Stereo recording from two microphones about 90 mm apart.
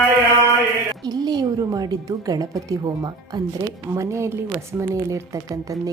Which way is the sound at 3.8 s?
35° right (ahead or behind).